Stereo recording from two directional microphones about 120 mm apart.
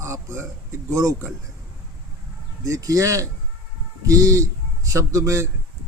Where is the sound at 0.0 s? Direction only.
25° right (ahead or behind).